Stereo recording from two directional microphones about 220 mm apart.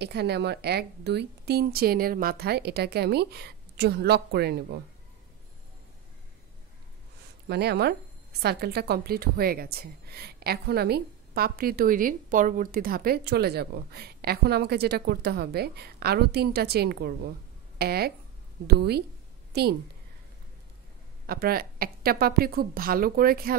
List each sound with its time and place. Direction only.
0.0 s a woman's voice: 50° right (ahead or behind)
7.4 s a woman's voice: 50° right (ahead or behind)
21.3 s a woman's voice: 45° right (ahead or behind)